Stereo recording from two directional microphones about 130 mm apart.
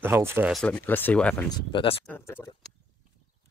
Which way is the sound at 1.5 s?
40° left (ahead or behind).